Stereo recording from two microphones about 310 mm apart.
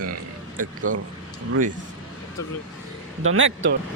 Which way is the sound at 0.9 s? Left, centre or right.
Right.